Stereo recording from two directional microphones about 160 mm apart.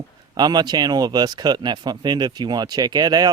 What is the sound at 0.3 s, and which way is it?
Speech, 25° right (ahead or behind).